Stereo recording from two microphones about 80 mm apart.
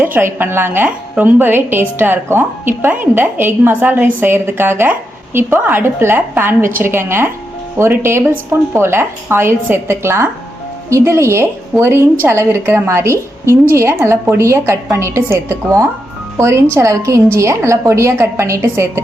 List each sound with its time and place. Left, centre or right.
0.0 s a woman's voice: right